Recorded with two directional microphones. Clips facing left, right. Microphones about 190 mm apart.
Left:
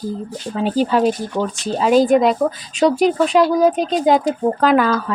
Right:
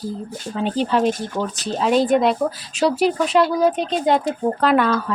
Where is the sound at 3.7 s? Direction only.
40° left (ahead or behind).